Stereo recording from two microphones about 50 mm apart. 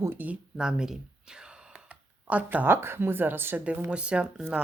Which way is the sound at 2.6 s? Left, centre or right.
Right.